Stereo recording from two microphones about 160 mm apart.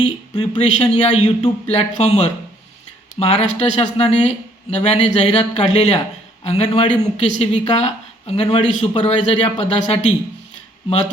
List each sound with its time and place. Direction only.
0.0 s a man's voice: 45° left (ahead or behind)